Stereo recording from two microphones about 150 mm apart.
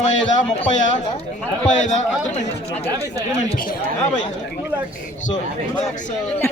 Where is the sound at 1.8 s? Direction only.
50° left (ahead or behind).